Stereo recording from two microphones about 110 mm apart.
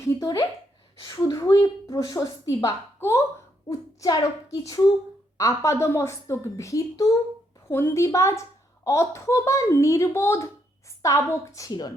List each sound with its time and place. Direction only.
0.0 s a woman's voice: 40° left (ahead or behind)
5.4 s a woman's voice: 25° left (ahead or behind)